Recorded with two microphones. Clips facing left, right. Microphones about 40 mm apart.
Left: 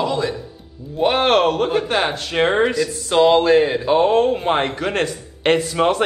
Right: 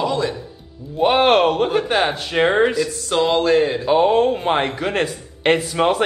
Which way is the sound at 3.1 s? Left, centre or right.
Centre.